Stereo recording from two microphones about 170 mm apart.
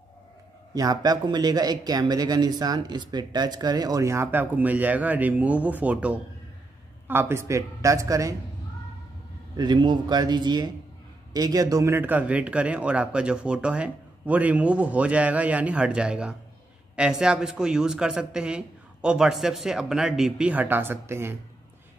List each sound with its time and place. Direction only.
0.7 s a man's voice: 20° right (ahead or behind)
9.6 s a man's voice: 25° right (ahead or behind)